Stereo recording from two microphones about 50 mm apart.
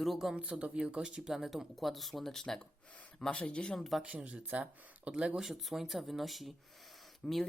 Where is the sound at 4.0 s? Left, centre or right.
Right.